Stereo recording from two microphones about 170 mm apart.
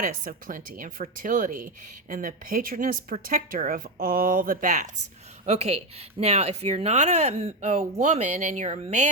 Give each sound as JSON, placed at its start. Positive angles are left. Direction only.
{"t": 0.0, "sound": "speech", "side_deg": -55}
{"t": 5.5, "sound": "speech", "side_deg": -35}